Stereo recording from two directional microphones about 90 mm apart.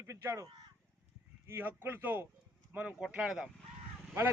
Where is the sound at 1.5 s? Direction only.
30° right (ahead or behind).